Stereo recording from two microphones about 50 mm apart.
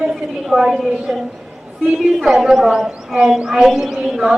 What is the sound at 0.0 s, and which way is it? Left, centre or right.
Speech, centre.